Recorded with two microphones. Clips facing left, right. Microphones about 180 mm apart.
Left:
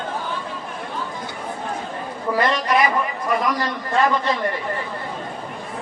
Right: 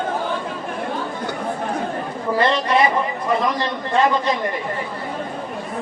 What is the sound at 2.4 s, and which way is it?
A man's voice, 30° right (ahead or behind).